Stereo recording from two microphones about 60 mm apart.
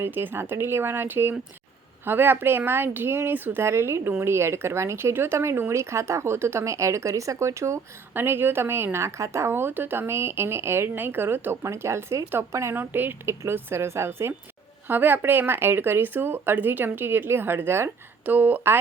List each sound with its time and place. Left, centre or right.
0.0 s a woman's voice: right
3.6 s speech: right
8.1 s a woman's voice: right
11.6 s speech: right
12.7 s a woman's voice: right
14.8 s a woman's voice: right
18.3 s a woman's voice: right